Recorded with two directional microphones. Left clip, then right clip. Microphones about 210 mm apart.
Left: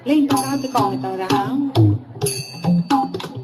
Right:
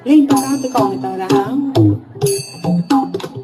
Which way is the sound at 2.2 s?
55° right (ahead or behind).